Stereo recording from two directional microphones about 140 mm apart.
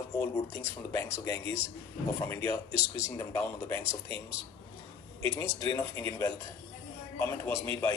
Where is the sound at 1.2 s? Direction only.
20° left (ahead or behind).